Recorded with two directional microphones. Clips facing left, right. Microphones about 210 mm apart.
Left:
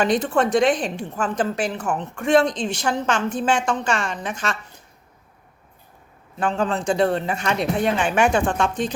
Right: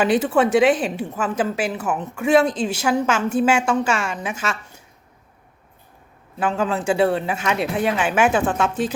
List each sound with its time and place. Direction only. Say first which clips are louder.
0.0 s a woman's voice: right 2 dB; 5° right (ahead or behind)
6.4 s speech: right 1 dB; 5° right (ahead or behind)